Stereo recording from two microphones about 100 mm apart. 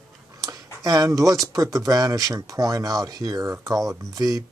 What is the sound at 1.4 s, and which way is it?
Speech, 35° right (ahead or behind).